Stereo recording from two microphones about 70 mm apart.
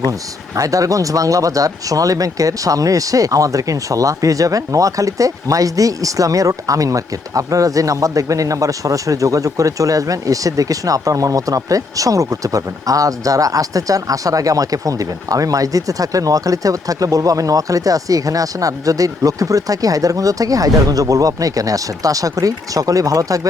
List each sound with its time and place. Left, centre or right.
0.1 s speech: right